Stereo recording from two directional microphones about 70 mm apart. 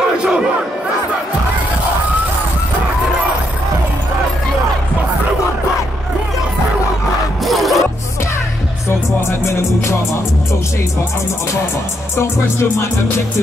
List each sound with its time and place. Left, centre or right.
0.2 s crowd: centre
7.4 s music: centre
8.8 s music: left